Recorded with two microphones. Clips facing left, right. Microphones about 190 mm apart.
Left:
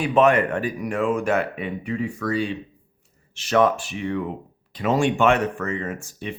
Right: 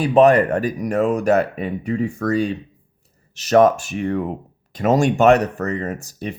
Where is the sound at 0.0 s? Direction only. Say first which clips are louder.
Right 5 dB; 35° right (ahead or behind).